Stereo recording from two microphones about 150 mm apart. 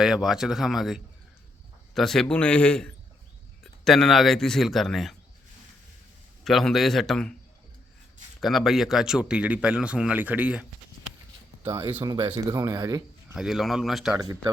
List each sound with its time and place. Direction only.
0.0 s a man's voice: 5° right (ahead or behind)
6.4 s speech: centre (ahead or behind)
8.4 s speech: centre (ahead or behind)
12.0 s speech: 30° right (ahead or behind)
13.3 s speech: 5° right (ahead or behind)
14.2 s speech: 25° right (ahead or behind)